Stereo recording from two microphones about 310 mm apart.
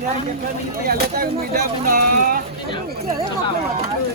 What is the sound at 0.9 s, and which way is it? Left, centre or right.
Speech, right.